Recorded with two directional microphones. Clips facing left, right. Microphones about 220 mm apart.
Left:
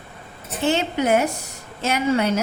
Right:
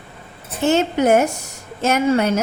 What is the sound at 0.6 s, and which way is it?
A woman's voice, 45° right (ahead or behind).